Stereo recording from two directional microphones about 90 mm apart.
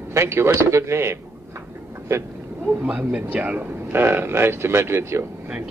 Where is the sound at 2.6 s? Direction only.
15° right (ahead or behind).